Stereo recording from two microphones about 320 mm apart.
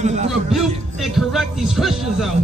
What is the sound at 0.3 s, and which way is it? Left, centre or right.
Music, centre.